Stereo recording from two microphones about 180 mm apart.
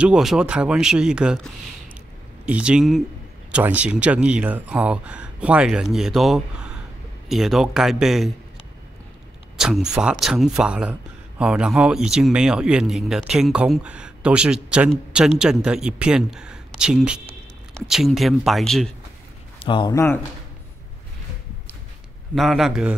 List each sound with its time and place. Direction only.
0.0 s speech: 5° right (ahead or behind)
9.6 s a sound: 5° right (ahead or behind)
9.9 s speech: 5° right (ahead or behind)
19.6 s speech: 25° left (ahead or behind)
22.3 s speech: centre (ahead or behind)